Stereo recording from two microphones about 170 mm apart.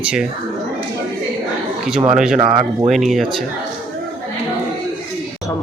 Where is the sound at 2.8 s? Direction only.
Centre (ahead or behind).